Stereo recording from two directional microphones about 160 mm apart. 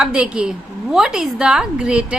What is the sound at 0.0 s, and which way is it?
A woman's voice, 5° right (ahead or behind).